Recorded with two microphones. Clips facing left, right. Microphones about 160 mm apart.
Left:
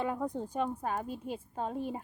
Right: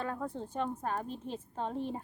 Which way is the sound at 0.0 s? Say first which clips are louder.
Left 4 dB; 15° left (ahead or behind).